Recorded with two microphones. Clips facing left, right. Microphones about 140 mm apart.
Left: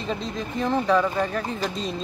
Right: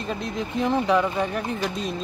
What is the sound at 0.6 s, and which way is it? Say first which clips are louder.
Speech: even; 15° right (ahead or behind).